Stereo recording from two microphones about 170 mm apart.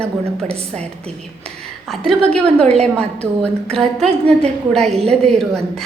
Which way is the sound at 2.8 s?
5° left (ahead or behind).